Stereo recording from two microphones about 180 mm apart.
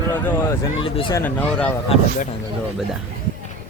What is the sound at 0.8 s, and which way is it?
Speech, 30° left (ahead or behind).